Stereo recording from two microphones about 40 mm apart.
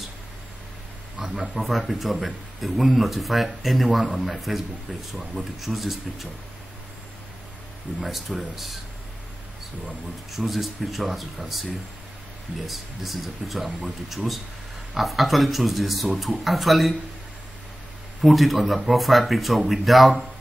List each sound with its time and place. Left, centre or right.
1.2 s speech: centre
8.0 s speech: centre
9.8 s speech: centre
12.6 s speech: centre
18.2 s speech: centre